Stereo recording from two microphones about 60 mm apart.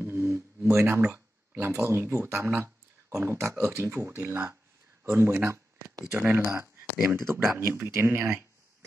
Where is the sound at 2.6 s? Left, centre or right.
Right.